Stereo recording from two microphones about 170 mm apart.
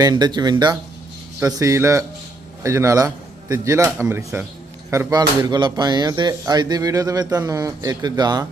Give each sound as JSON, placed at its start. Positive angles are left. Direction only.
{"t": 0.0, "sound": "speech", "side_deg": -25}
{"t": 5.4, "sound": "speech", "side_deg": -25}